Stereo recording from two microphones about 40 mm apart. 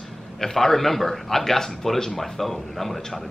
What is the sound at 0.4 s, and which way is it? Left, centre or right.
A man's voice, centre.